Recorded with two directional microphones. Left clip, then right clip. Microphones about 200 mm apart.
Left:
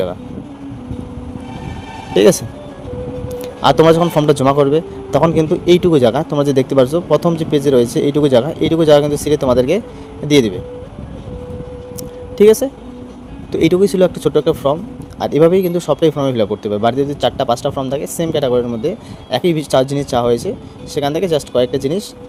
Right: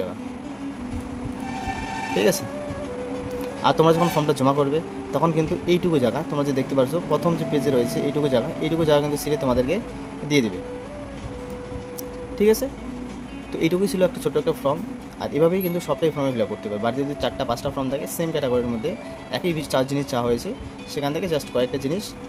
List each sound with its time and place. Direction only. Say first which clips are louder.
2.1 s a man's voice: left 10 dB; 40° left (ahead or behind)
3.6 s a man's voice: left 8 dB; 40° left (ahead or behind)
12.4 s a man's voice: left 10 dB; 40° left (ahead or behind)